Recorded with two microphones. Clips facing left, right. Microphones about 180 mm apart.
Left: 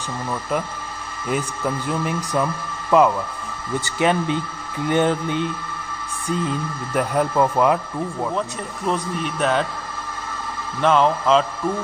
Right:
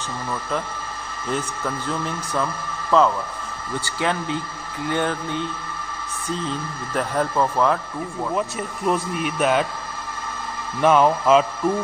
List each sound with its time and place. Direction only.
1.3 s speech: 15° left (ahead or behind)
8.4 s speech: 5° right (ahead or behind)
10.8 s speech: 10° right (ahead or behind)